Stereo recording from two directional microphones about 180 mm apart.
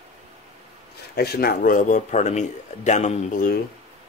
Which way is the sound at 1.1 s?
60° left (ahead or behind).